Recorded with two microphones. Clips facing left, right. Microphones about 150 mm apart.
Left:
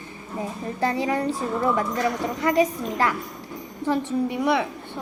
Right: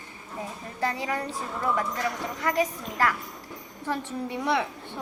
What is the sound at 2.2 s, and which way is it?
A woman's voice, 20° left (ahead or behind).